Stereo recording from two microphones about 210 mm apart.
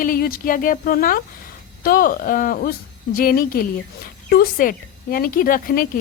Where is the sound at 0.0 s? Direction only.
40° left (ahead or behind).